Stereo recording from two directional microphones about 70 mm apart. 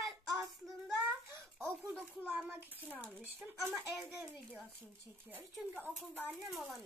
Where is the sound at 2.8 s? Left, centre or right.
Left.